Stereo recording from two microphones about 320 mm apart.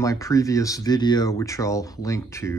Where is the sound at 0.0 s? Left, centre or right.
Centre.